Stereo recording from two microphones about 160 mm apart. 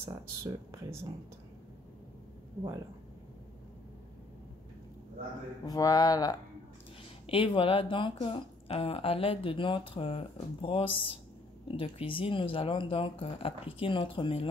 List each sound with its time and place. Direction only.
0.0 s speech: 20° right (ahead or behind)
5.7 s speech: 25° left (ahead or behind)